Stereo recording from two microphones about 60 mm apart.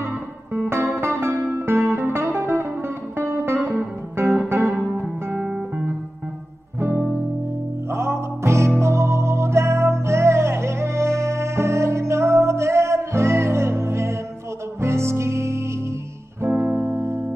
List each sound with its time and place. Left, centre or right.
0.9 s music: right
4.6 s music: centre
7.9 s music: right